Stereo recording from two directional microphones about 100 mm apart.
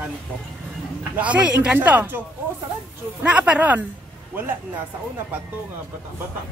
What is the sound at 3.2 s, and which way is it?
Speech, 10° right (ahead or behind).